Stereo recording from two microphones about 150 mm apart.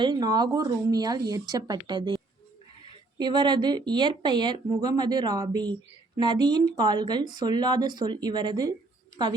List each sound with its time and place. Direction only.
0.0 s speech: 25° right (ahead or behind)